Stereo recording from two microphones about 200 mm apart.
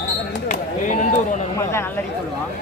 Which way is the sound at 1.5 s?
10° left (ahead or behind).